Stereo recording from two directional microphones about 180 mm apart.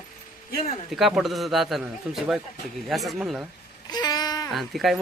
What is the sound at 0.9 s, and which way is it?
A man's voice, centre (ahead or behind).